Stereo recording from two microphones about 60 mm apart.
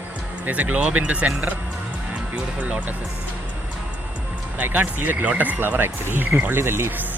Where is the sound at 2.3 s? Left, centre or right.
Right.